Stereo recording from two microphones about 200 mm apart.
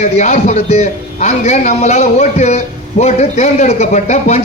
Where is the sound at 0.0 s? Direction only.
35° left (ahead or behind).